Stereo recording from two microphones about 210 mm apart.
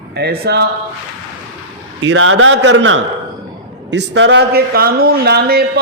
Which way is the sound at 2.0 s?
70° right (ahead or behind).